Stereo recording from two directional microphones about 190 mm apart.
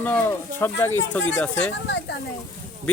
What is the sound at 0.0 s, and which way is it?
Speech, 10° left (ahead or behind).